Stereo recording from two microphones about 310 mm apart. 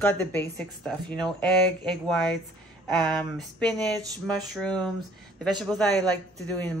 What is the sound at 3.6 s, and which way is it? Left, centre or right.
A woman's voice, centre.